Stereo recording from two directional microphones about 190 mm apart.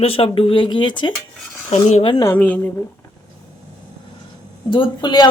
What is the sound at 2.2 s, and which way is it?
Speech, 10° left (ahead or behind).